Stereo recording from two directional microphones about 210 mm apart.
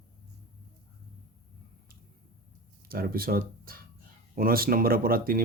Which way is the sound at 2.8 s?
45° right (ahead or behind).